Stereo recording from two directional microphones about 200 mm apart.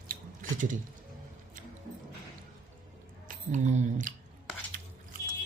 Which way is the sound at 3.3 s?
35° right (ahead or behind).